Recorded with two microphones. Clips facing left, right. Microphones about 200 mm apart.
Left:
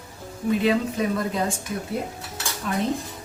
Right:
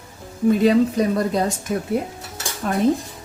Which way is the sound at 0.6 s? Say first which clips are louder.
Right 6 dB; 40° right (ahead or behind).